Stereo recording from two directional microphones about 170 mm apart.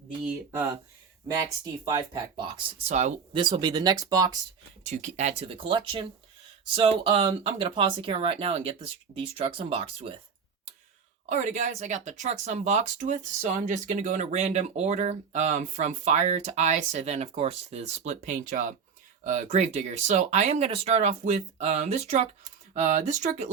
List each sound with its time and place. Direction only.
1.8 s speech: 20° right (ahead or behind); by 3.2 s 45° right (ahead or behind)
3.3 s speech: 30° right (ahead or behind)
4.8 s speech: 45° right (ahead or behind)
11.3 s speech: 45° right (ahead or behind)